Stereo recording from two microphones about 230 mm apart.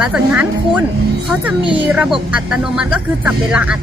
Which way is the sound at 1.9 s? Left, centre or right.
Centre.